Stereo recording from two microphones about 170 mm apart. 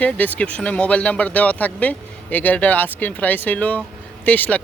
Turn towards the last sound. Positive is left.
turn(degrees=10)  # may be behind; listen again after turning